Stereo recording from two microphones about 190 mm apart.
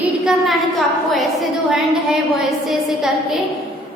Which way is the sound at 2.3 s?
Centre (ahead or behind).